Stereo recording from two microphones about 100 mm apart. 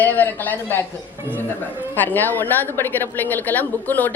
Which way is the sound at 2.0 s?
20° left (ahead or behind).